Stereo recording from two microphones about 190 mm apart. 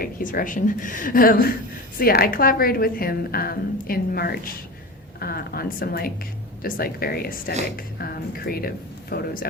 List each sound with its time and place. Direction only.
0.0 s a woman's voice: 45° left (ahead or behind)